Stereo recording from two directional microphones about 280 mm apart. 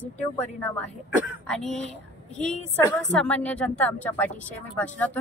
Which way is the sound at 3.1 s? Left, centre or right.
Centre.